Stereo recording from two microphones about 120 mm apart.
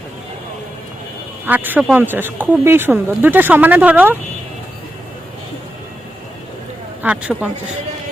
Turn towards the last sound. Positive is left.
turn(degrees=-10)  # may be behind; listen again after turning